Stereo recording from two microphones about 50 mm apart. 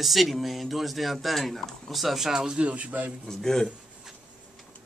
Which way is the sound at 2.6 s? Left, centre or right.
Right.